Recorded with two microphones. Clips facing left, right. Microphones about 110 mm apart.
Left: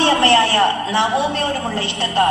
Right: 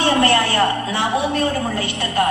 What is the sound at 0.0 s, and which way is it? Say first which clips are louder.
A man's voice: left 2 dB; 25° left (ahead or behind).